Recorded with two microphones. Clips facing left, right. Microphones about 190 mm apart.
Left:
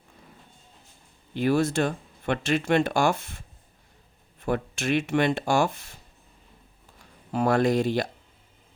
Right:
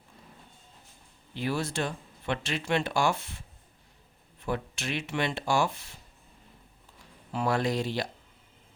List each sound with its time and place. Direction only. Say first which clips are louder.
1.3 s speech: left 8 dB; 50° left (ahead or behind)
7.3 s speech: left 6 dB; 45° left (ahead or behind)